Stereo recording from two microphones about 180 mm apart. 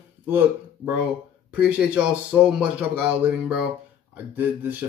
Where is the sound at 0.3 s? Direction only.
10° right (ahead or behind).